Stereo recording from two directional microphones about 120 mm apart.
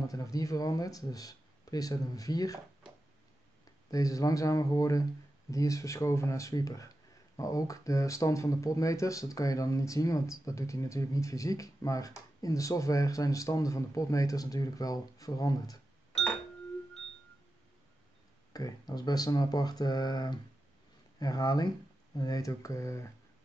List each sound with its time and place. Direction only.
0.0 s speech: 30° left (ahead or behind)
3.9 s speech: 30° left (ahead or behind)
18.5 s speech: 30° left (ahead or behind)